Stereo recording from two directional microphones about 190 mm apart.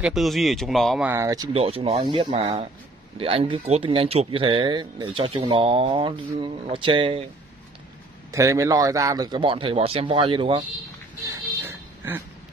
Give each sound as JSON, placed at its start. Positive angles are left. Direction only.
{"t": 0.0, "sound": "speech", "side_deg": 0}
{"t": 1.1, "sound": "speech", "side_deg": -15}
{"t": 1.5, "sound": "speech", "side_deg": -30}
{"t": 8.3, "sound": "speech", "side_deg": -15}
{"t": 11.6, "sound": "a sound", "side_deg": -10}